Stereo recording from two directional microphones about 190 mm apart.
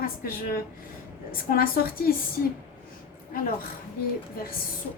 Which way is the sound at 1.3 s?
50° left (ahead or behind).